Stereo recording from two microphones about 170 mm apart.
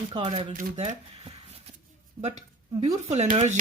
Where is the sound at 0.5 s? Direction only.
40° right (ahead or behind).